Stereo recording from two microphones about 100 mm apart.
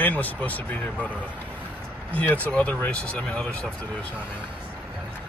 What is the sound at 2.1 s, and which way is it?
Speech, 15° left (ahead or behind).